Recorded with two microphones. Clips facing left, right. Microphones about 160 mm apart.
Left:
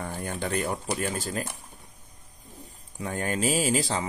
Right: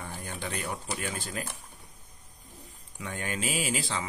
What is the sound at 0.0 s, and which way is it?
Speech, 50° left (ahead or behind).